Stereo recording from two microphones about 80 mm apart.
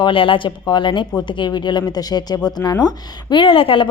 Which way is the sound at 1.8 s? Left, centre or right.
Left.